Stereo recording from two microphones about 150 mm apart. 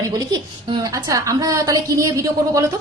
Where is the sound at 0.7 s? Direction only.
25° right (ahead or behind).